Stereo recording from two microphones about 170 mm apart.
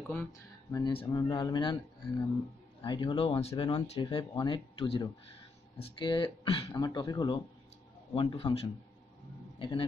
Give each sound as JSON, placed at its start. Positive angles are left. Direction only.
{"t": 0.1, "sound": "a man's voice", "side_deg": 15}